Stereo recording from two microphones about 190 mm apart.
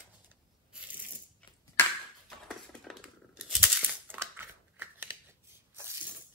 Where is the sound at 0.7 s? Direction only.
10° right (ahead or behind).